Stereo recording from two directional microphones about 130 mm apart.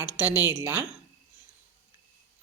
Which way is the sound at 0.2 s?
10° right (ahead or behind).